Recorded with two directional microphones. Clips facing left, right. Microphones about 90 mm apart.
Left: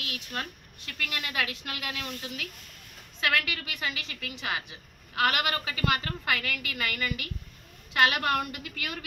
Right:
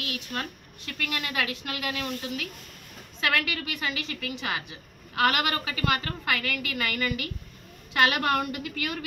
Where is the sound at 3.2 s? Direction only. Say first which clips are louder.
Right 1 dB; 15° left (ahead or behind).